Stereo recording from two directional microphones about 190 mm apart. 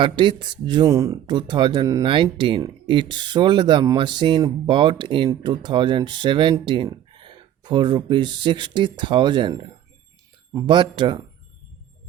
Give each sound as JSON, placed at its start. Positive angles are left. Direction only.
{"t": 0.0, "sound": "speech", "side_deg": -25}